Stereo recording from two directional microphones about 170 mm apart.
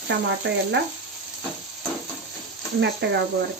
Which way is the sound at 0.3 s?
90° right.